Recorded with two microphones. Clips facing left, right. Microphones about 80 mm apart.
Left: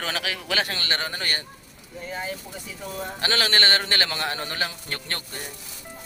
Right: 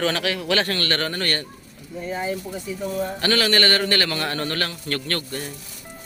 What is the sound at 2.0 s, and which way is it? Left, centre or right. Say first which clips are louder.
Speech: right 6 dB; centre.